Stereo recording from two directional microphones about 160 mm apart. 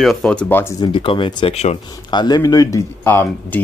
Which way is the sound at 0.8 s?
30° left (ahead or behind).